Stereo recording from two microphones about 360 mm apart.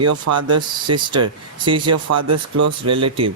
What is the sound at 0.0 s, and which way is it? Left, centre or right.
Speech, right.